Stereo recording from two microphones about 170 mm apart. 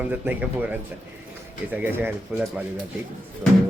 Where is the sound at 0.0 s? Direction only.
10° right (ahead or behind).